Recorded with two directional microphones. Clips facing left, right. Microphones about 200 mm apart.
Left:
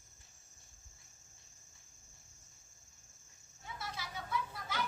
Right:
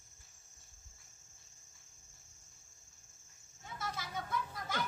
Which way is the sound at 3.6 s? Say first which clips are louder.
Right 2 dB; 50° right (ahead or behind).